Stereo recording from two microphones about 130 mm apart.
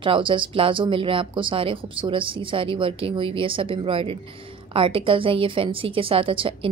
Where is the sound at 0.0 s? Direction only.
40° right (ahead or behind).